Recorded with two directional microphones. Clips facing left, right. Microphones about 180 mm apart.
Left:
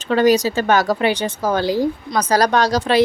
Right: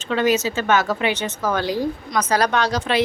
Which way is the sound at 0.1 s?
40° left (ahead or behind).